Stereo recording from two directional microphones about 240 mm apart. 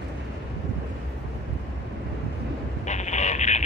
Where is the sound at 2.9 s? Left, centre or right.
Left.